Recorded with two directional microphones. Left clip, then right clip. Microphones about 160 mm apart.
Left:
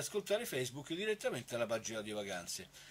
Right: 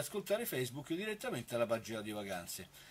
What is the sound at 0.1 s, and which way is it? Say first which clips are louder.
Speech: left 1 dB; 50° right (ahead or behind).